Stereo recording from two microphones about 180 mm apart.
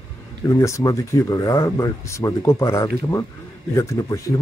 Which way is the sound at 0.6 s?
15° left (ahead or behind).